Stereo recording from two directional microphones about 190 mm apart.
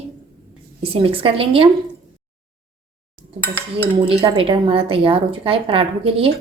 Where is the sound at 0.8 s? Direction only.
30° right (ahead or behind).